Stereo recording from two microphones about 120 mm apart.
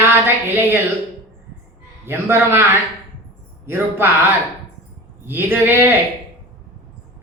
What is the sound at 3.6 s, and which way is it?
Speech, 20° right (ahead or behind).